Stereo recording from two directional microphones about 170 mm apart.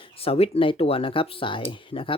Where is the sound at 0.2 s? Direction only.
35° left (ahead or behind).